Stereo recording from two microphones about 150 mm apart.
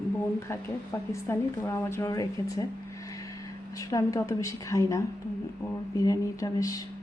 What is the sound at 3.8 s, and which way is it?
Speech, 20° left (ahead or behind).